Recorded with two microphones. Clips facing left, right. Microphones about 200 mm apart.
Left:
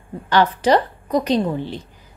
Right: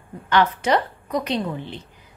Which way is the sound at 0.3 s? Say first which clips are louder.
Left 3 dB; 35° left (ahead or behind).